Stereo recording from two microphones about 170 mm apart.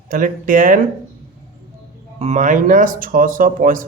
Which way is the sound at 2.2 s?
45° right (ahead or behind).